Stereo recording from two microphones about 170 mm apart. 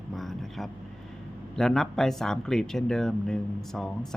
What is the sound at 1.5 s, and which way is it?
Speech, 5° left (ahead or behind).